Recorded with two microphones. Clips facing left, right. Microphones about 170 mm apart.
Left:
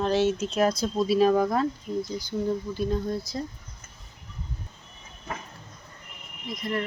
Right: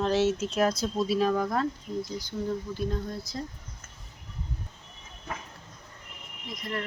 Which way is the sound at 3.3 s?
15° left (ahead or behind).